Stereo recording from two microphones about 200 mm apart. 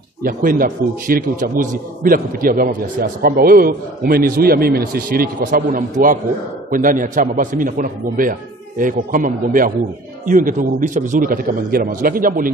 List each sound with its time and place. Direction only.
0.2 s a man's voice: 45° right (ahead or behind)